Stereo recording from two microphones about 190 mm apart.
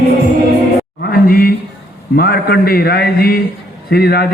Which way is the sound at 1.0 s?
55° left (ahead or behind).